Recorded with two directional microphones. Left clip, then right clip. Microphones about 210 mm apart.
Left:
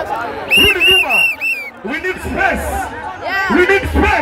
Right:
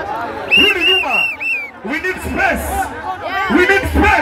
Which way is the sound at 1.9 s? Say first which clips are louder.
Even; 5° right (ahead or behind).